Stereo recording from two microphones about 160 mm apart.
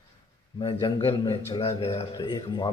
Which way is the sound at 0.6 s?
30° left (ahead or behind).